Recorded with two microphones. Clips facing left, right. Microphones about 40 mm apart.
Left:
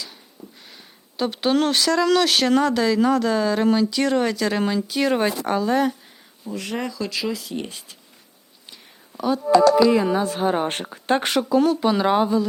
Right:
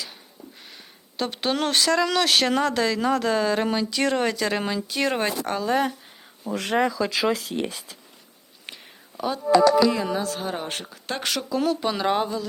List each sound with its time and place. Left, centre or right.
1.1 s speech: centre
6.5 s speech: right
7.3 s speech: right
9.1 s speech: centre
9.9 s speech: centre
10.7 s speech: left
11.5 s speech: centre